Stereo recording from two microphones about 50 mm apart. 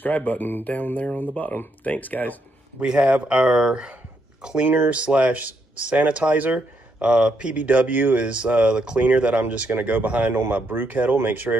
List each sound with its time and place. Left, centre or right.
0.0 s speech: left
2.8 s speech: centre
7.0 s speech: centre
7.5 s speech: right